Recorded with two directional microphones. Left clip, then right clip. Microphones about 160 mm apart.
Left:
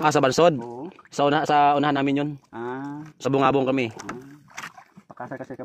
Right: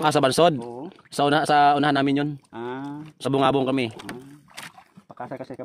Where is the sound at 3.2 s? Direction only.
30° right (ahead or behind).